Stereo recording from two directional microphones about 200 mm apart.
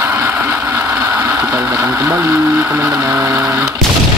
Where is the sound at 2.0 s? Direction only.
10° right (ahead or behind).